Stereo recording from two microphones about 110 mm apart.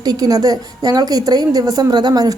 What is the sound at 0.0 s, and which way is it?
A woman's voice, 35° right (ahead or behind).